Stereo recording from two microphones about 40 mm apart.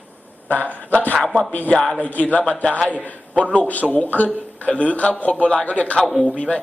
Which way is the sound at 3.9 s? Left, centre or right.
Left.